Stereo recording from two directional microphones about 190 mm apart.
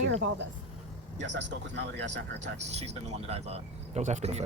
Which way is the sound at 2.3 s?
35° right (ahead or behind).